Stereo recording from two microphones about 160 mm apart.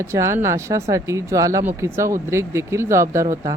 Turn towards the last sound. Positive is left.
turn(degrees=-20)  # may be behind; listen again after turning